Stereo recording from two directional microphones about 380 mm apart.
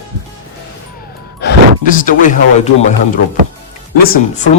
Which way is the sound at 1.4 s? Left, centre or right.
Left.